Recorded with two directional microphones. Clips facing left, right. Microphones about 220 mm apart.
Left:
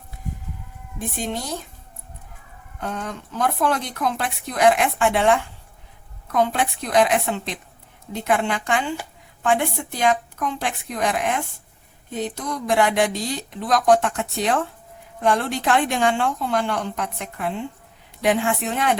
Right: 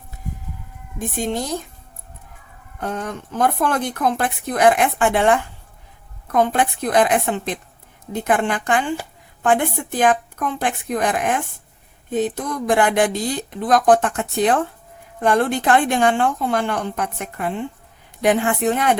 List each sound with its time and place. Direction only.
2.8 s a woman's voice: 50° right (ahead or behind)